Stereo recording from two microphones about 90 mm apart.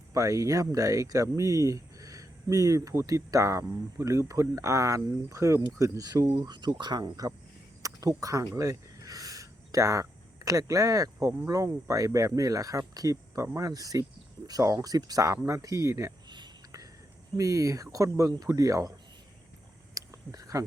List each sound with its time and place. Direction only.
0.1 s speech: 40° right (ahead or behind)
6.4 s speech: 55° right (ahead or behind); by 8.4 s 40° right (ahead or behind)
8.5 s a sound: 40° right (ahead or behind)
11.4 s speech: 40° right (ahead or behind)
17.3 s speech: 35° right (ahead or behind)
19.9 s a sound: 40° right (ahead or behind)